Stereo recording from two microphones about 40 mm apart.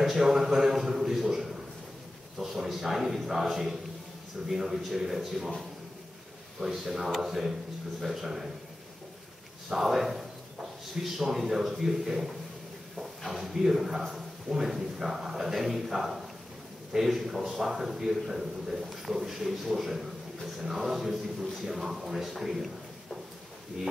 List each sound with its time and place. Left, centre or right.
0.0 s a man's voice: centre
6.6 s a man's voice: centre
9.7 s a man's voice: centre